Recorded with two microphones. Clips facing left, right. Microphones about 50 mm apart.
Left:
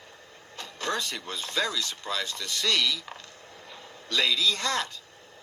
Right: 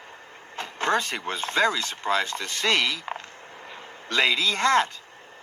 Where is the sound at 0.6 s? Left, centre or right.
Right.